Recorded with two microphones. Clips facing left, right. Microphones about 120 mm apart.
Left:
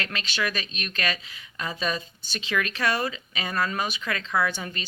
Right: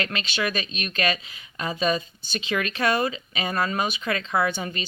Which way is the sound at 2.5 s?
30° right (ahead or behind).